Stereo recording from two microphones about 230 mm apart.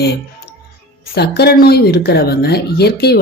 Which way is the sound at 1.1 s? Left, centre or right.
Left.